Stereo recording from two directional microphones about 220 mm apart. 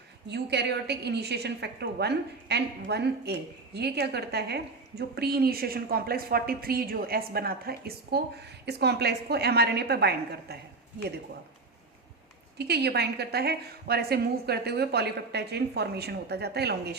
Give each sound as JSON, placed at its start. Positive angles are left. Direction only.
{"t": 0.3, "sound": "a woman's voice", "side_deg": -50}
{"t": 12.5, "sound": "a woman's voice", "side_deg": -50}